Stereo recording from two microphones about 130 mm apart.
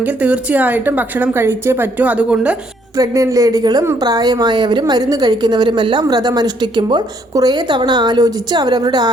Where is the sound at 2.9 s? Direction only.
25° right (ahead or behind).